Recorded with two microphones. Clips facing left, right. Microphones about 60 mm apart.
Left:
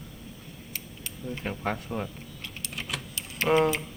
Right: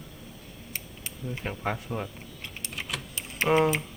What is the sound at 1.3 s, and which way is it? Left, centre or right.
Speech, centre.